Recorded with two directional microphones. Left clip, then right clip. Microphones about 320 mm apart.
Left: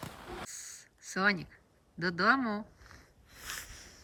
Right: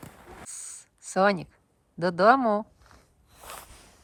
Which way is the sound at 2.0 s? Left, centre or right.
Centre.